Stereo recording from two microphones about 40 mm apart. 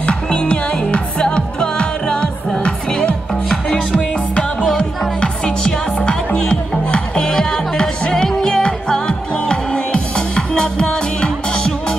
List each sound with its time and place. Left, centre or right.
0.0 s music: left